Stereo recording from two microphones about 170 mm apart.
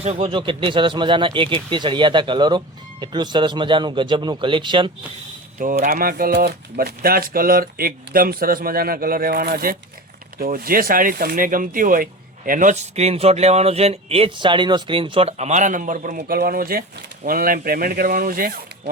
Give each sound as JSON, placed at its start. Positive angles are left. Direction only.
{"t": 0.0, "sound": "speech", "side_deg": -35}
{"t": 5.5, "sound": "speech", "side_deg": -50}